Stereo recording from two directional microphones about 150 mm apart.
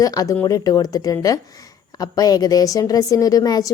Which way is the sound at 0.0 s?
25° left (ahead or behind).